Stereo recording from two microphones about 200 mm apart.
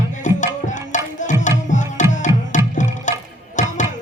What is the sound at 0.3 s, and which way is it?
Music, 40° left (ahead or behind).